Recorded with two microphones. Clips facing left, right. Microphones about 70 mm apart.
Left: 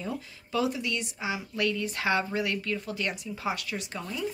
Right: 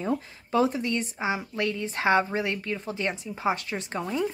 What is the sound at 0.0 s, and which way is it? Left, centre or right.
Speech, right.